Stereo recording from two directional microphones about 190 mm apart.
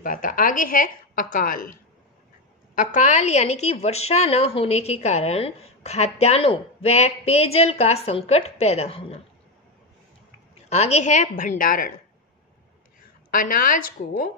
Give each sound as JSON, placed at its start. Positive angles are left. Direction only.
{"t": 0.0, "sound": "a woman's voice", "side_deg": 45}
{"t": 2.7, "sound": "a woman's voice", "side_deg": 40}
{"t": 10.5, "sound": "a woman's voice", "side_deg": 35}
{"t": 13.3, "sound": "a woman's voice", "side_deg": 45}